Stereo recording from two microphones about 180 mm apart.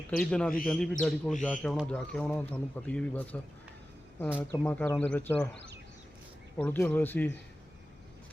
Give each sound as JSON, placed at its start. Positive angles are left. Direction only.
{"t": 0.2, "sound": "a man's voice", "side_deg": 5}
{"t": 4.6, "sound": "a man's voice", "side_deg": 10}
{"t": 6.6, "sound": "a man's voice", "side_deg": 10}